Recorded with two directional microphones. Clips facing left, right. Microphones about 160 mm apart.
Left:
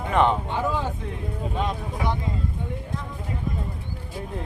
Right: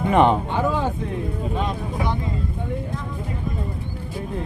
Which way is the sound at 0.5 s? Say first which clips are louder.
Right 4 dB; 60° right (ahead or behind).